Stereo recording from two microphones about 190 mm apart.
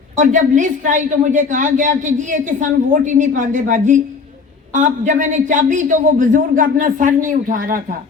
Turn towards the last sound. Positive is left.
turn(degrees=-45)  # may be behind; listen again after turning